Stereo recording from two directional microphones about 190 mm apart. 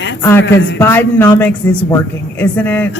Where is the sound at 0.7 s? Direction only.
10° left (ahead or behind).